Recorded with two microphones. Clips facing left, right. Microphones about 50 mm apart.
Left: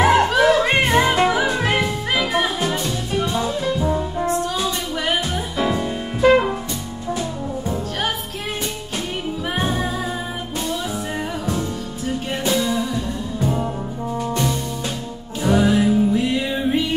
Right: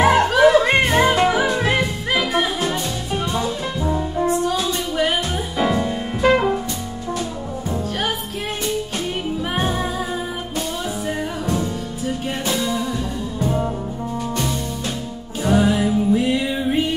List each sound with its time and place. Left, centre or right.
0.0 s music: centre
3.3 s brass instrument: centre
5.7 s music: centre
12.1 s music: centre
15.4 s music: centre